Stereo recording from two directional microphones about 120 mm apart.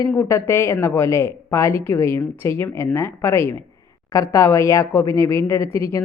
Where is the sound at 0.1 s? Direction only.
20° left (ahead or behind).